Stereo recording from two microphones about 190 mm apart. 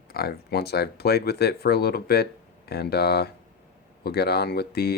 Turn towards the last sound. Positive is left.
turn(degrees=55)  # may be behind; listen again after turning